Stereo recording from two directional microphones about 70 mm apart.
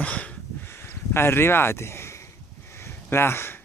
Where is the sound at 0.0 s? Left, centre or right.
Centre.